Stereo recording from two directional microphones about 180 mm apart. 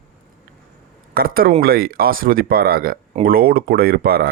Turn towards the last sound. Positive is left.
turn(degrees=-55)  # may be behind; listen again after turning